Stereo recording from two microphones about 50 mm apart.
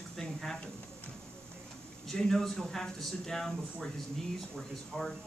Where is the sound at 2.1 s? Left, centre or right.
Centre.